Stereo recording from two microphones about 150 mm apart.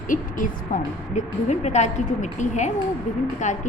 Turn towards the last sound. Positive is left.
turn(degrees=55)  # may be behind; listen again after turning